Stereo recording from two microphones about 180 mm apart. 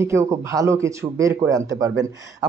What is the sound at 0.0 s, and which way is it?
Speech, 15° right (ahead or behind).